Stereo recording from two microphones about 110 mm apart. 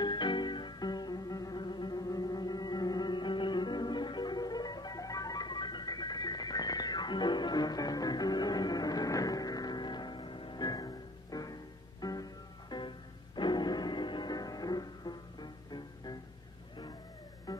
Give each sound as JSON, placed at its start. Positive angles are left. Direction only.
{"t": 0.0, "sound": "music", "side_deg": 45}
{"t": 17.5, "sound": "music", "side_deg": 35}